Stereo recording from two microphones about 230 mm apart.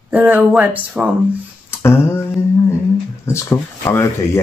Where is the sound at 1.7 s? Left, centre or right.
Centre.